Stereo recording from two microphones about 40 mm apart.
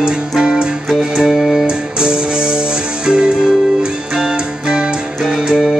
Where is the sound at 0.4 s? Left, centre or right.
Right.